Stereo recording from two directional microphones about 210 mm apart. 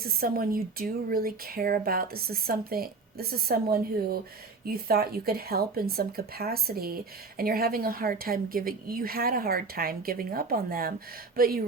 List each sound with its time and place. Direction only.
0.0 s speech: 45° right (ahead or behind)